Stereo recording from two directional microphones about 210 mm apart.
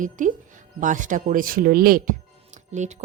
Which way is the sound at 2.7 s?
35° right (ahead or behind).